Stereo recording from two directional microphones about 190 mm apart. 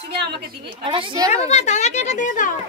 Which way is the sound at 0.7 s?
25° right (ahead or behind).